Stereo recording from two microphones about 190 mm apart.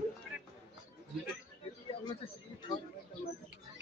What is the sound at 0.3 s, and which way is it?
Music, 5° right (ahead or behind).